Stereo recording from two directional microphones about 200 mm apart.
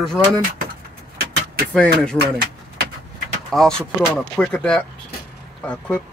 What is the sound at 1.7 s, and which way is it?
Speech, 5° left (ahead or behind).